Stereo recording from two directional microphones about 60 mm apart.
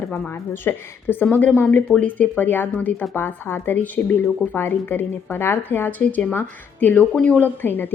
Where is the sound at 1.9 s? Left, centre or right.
Left.